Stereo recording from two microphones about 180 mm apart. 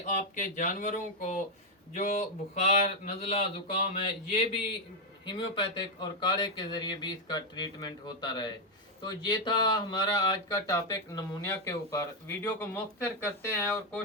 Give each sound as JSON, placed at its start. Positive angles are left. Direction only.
{"t": 0.0, "sound": "speech", "side_deg": 45}